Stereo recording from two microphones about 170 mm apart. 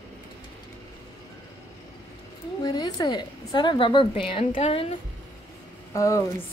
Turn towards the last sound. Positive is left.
turn(degrees=15)  # may be behind; listen again after turning